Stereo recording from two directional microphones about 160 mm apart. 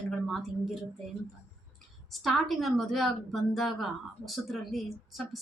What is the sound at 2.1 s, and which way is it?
A woman's voice, centre (ahead or behind).